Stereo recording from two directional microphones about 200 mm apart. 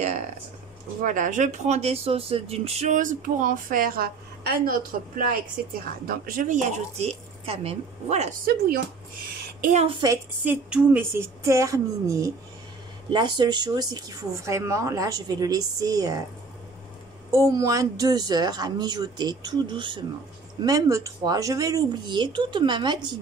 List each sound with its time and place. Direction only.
1.0 s speech: 40° right (ahead or behind)
8.5 s speech: 50° right (ahead or behind)
9.6 s a woman's voice: 35° right (ahead or behind)
10.4 s speech: 10° right (ahead or behind)
17.3 s a woman's voice: 15° right (ahead or behind)